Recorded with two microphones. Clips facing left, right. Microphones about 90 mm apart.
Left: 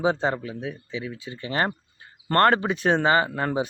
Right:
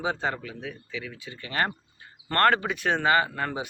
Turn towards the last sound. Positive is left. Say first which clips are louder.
# left 2 dB
turn(degrees=25)  # may be behind; listen again after turning